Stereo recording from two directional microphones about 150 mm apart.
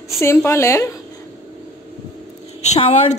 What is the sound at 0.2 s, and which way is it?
Speech, 15° left (ahead or behind).